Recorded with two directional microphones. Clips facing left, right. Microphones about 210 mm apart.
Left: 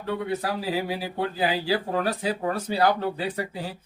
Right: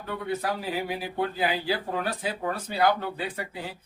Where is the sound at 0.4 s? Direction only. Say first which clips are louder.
Left 2 dB; 35° left (ahead or behind).